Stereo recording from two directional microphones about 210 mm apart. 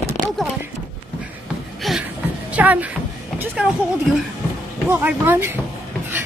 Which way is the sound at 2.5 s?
5° right (ahead or behind).